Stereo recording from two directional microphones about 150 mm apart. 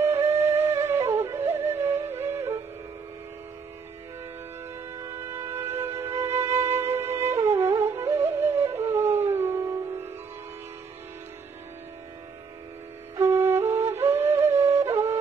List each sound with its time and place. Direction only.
0.0 s music: 15° right (ahead or behind)
5.0 s music: 15° right (ahead or behind)
13.1 s flute: 15° right (ahead or behind)